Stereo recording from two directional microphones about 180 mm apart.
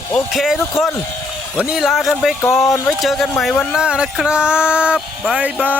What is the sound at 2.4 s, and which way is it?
Speech, 15° left (ahead or behind).